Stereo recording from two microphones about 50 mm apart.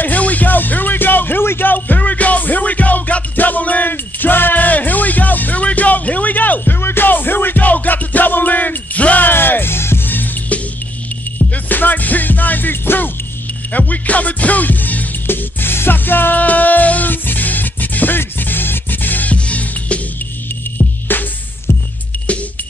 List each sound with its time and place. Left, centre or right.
0.0 s music: left
6.8 s music: left
9.3 s music: left
11.3 s music: left
19.3 s music: left
20.7 s music: left